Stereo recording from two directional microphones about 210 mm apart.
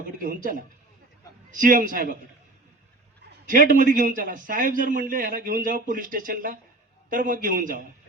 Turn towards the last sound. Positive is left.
turn(degrees=-40)  # may be behind; listen again after turning